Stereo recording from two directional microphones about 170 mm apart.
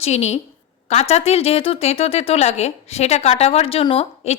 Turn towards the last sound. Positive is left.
turn(degrees=35)  # may be behind; listen again after turning